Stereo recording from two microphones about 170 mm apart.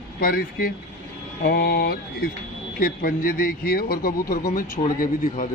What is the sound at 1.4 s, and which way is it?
Mantra, 70° left (ahead or behind).